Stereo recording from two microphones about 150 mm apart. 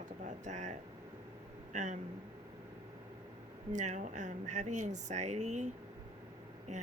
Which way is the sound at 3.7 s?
55° right (ahead or behind).